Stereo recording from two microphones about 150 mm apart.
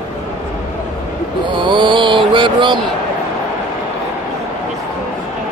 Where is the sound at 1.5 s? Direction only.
35° right (ahead or behind).